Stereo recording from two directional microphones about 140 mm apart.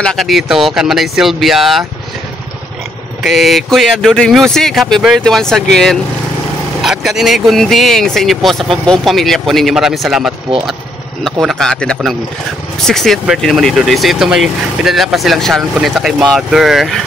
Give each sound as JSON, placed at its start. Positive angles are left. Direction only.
{"t": 0.0, "sound": "speech", "side_deg": 0}
{"t": 3.3, "sound": "speech", "side_deg": 0}